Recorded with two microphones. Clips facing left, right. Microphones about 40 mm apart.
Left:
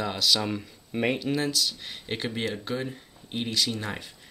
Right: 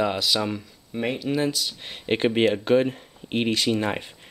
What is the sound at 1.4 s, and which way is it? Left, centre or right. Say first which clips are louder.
Speech: right 3 dB; centre.